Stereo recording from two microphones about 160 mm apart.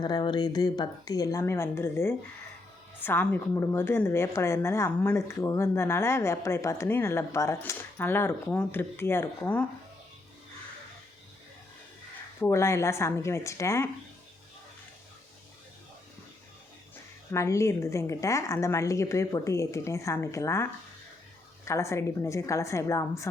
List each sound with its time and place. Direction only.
0.0 s a woman's voice: 30° left (ahead or behind); by 9.6 s 10° left (ahead or behind)
12.4 s a woman's voice: 15° left (ahead or behind)
17.3 s a woman's voice: 20° left (ahead or behind)